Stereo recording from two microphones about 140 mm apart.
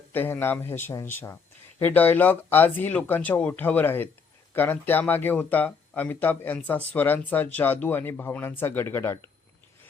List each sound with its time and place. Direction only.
0.1 s speech: 15° left (ahead or behind)